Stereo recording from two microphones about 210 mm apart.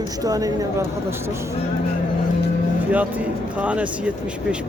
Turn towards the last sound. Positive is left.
turn(degrees=-5)  # may be behind; listen again after turning